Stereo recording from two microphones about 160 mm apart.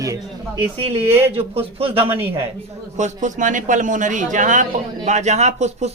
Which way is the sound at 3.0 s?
50° right (ahead or behind).